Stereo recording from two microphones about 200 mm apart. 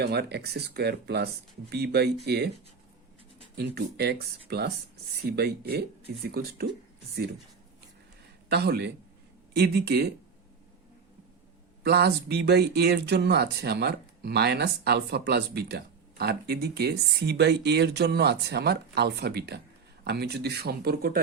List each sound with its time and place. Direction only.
0.0 s speech: 55° right (ahead or behind)
3.8 s speech: 55° right (ahead or behind)
8.4 s speech: 55° right (ahead or behind)
11.8 s speech: 55° right (ahead or behind)